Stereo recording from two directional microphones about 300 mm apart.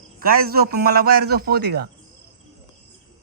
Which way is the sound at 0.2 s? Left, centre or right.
Right.